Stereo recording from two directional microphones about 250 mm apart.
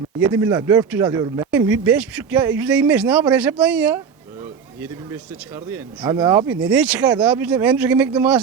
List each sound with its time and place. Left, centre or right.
0.2 s speech: centre
5.5 s speech: centre
6.5 s speech: centre